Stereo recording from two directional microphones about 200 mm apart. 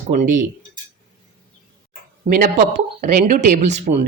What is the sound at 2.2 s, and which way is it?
Speech, 35° right (ahead or behind).